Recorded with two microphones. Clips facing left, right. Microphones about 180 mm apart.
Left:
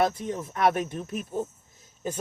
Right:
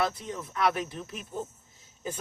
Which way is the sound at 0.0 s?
45° left (ahead or behind).